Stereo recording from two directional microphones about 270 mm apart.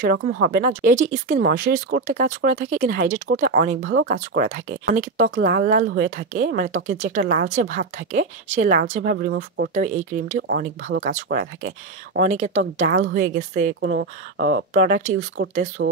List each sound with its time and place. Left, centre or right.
0.0 s speech: right
15.8 s speech: right